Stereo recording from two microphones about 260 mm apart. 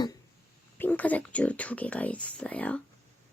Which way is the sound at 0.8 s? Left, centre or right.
Centre.